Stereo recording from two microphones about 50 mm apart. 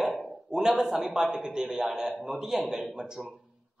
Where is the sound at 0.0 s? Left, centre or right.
Centre.